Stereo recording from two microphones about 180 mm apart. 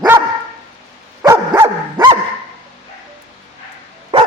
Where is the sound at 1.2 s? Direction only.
20° right (ahead or behind).